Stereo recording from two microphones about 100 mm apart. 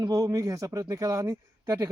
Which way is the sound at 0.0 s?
35° right (ahead or behind).